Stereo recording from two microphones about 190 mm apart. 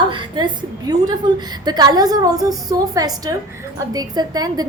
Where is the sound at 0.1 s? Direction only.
25° right (ahead or behind).